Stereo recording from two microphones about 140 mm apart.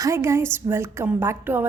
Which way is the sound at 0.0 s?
20° right (ahead or behind).